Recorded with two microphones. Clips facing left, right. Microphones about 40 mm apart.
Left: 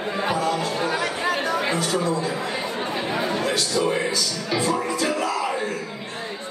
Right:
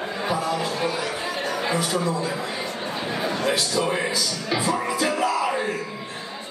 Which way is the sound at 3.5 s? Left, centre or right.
Centre.